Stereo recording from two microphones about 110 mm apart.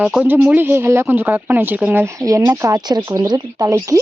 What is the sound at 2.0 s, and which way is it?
Speech, 30° right (ahead or behind).